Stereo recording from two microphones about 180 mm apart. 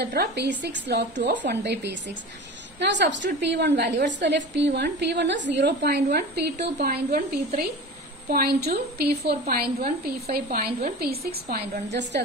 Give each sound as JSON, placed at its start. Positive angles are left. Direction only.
{"t": 0.0, "sound": "a woman's voice", "side_deg": -65}